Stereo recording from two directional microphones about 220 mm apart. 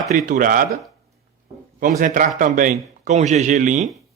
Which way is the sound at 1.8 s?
35° right (ahead or behind).